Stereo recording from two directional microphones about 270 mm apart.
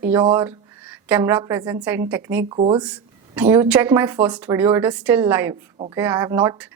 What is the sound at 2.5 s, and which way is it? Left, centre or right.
Speech, centre.